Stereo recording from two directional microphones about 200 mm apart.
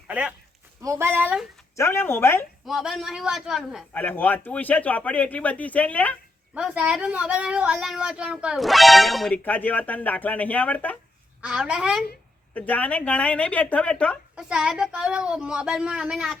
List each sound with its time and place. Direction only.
0.1 s speech: 5° right (ahead or behind)
1.7 s speech: 15° left (ahead or behind)
2.6 s speech: centre (ahead or behind)
3.9 s speech: 10° left (ahead or behind)
6.5 s speech: 5° right (ahead or behind)
11.3 s speech: 5° right (ahead or behind)
12.5 s speech: 5° left (ahead or behind)